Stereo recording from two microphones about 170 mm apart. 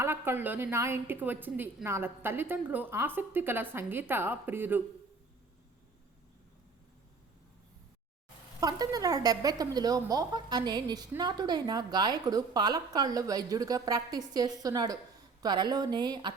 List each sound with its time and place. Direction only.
0.0 s a woman's voice: 15° right (ahead or behind)
8.6 s a woman's voice: 20° right (ahead or behind)